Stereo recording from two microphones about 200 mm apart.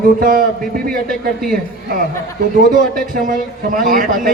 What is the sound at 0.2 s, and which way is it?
Speech, 45° right (ahead or behind).